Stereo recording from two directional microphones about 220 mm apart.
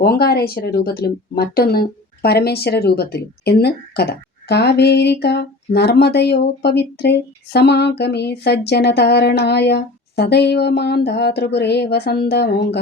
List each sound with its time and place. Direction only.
0.0 s speech: 45° left (ahead or behind)